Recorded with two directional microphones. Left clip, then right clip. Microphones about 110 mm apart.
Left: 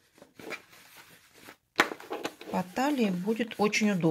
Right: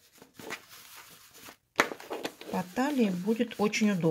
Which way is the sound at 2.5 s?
5° right (ahead or behind).